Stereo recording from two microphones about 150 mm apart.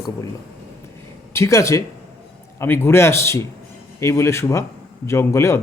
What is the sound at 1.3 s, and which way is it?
A man's voice, 20° left (ahead or behind).